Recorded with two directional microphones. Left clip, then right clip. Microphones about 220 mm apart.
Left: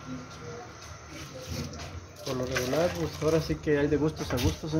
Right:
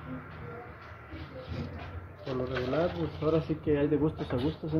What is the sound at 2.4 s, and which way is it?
Speech, 5° left (ahead or behind).